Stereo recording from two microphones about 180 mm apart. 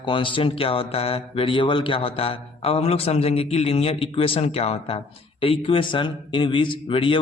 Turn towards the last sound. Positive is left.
turn(degrees=30)  # may be behind; listen again after turning